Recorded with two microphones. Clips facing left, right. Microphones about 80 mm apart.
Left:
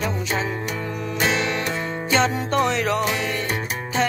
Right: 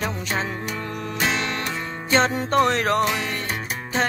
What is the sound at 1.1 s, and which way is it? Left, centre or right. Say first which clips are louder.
Music: left 2 dB; centre.